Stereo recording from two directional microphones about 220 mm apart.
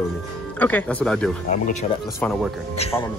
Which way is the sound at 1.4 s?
35° left (ahead or behind).